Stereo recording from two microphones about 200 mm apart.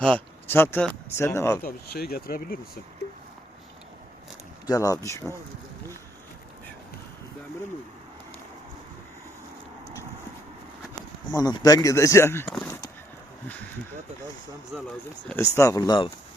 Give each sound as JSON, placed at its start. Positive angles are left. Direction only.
{"t": 0.0, "sound": "speech", "side_deg": 5}
{"t": 1.6, "sound": "speech", "side_deg": 50}
{"t": 4.6, "sound": "speech", "side_deg": 15}
{"t": 11.3, "sound": "speech", "side_deg": 20}
{"t": 12.5, "sound": "a sound", "side_deg": 10}
{"t": 15.3, "sound": "speech", "side_deg": 15}